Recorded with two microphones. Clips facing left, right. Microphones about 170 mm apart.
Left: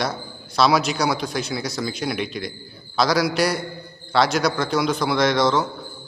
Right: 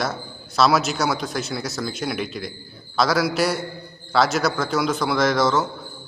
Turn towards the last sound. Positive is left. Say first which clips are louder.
# left 1 dB
turn(degrees=-5)  # may be behind; listen again after turning